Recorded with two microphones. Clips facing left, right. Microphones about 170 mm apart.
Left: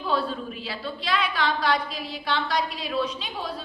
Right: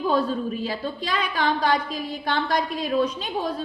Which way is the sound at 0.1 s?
45° right (ahead or behind).